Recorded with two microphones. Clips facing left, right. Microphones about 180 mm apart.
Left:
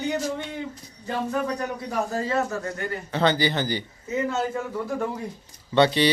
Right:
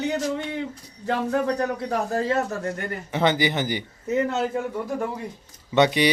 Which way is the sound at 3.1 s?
20° right (ahead or behind).